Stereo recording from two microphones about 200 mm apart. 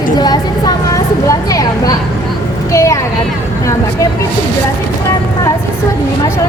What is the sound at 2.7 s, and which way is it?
Speech, 15° left (ahead or behind).